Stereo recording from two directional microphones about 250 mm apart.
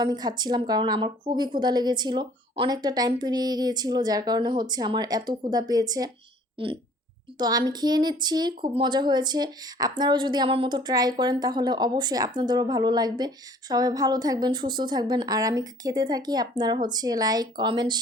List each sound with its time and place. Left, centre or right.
0.0 s a woman's voice: centre